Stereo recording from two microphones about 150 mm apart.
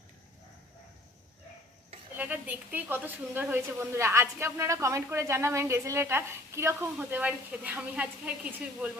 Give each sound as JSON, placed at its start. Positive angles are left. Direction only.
{"t": 2.1, "sound": "a woman's voice", "side_deg": -10}